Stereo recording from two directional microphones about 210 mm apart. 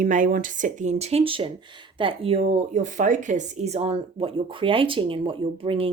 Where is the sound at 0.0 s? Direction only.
40° right (ahead or behind).